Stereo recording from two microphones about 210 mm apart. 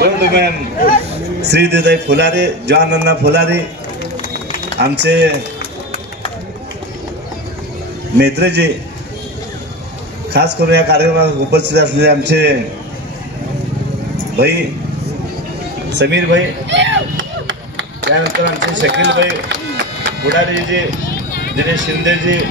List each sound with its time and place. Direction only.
0.0 s a sound: 50° right (ahead or behind)
1.5 s a man's voice: 55° right (ahead or behind)
4.7 s a man's voice: 55° right (ahead or behind)
8.2 s a man's voice: 55° right (ahead or behind)
10.3 s a man's voice: 50° right (ahead or behind)
14.3 s a man's voice: 50° right (ahead or behind)
16.0 s chop: 55° right (ahead or behind)
21.3 s run: 45° left (ahead or behind)
21.7 s speech: 60° right (ahead or behind)